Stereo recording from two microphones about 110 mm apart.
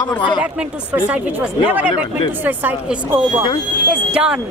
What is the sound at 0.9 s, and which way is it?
Speech, 10° right (ahead or behind).